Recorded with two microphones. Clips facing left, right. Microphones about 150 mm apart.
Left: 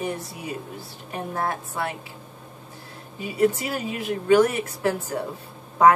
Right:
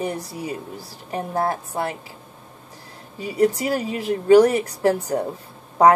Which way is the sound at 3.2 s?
35° right (ahead or behind).